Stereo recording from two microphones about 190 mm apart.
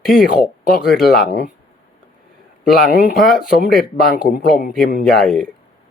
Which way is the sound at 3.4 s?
50° left (ahead or behind).